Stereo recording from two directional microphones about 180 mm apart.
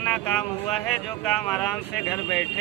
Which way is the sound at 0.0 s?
10° left (ahead or behind).